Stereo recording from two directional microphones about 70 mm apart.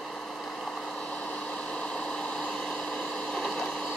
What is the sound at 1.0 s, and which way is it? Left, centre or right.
Vehicle, centre.